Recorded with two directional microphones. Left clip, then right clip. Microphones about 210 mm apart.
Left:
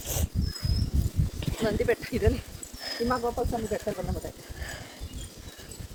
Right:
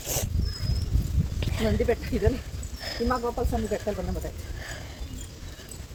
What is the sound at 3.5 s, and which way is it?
Speech, 15° right (ahead or behind).